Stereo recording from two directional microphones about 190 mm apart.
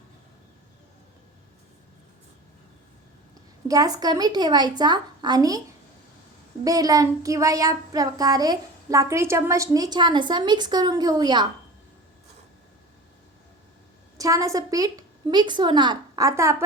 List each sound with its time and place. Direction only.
3.7 s speech: 20° right (ahead or behind)
6.7 s speech: 20° right (ahead or behind)
14.2 s speech: 20° right (ahead or behind)